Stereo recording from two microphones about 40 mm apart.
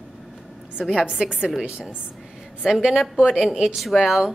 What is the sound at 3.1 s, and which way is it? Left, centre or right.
Speech, centre.